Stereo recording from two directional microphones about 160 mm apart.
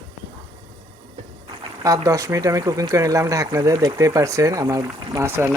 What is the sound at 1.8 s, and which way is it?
Speech, 20° right (ahead or behind).